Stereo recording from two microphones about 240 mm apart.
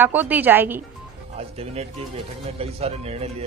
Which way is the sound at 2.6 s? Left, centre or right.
Right.